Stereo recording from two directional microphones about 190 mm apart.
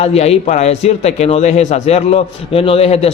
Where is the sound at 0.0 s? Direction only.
35° left (ahead or behind).